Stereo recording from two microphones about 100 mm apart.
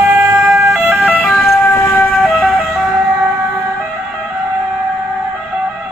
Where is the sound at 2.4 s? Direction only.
5° right (ahead or behind).